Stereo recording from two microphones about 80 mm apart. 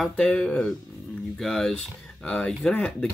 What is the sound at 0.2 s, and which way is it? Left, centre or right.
Speech, centre.